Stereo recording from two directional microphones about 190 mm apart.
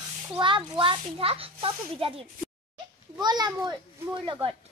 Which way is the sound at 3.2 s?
20° right (ahead or behind).